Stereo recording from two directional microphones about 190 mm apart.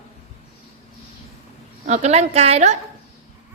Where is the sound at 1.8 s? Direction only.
35° right (ahead or behind).